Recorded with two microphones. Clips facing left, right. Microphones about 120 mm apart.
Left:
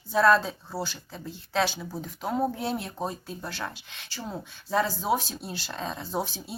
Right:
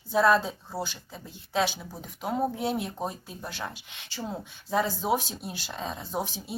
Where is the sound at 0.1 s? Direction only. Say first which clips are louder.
Left 1 dB; 15° right (ahead or behind).